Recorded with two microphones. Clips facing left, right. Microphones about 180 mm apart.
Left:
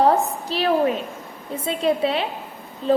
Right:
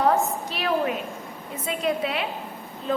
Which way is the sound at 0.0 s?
35° left (ahead or behind).